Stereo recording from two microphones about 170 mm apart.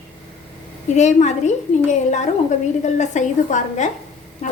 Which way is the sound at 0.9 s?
45° left (ahead or behind).